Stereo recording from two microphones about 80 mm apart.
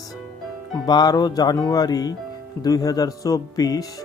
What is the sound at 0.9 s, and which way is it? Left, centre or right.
Speech, left.